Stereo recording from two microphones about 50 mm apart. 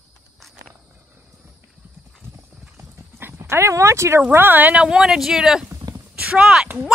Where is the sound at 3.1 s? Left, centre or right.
Right.